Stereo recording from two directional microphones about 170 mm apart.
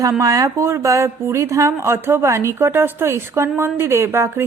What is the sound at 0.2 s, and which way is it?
Speech, 20° right (ahead or behind).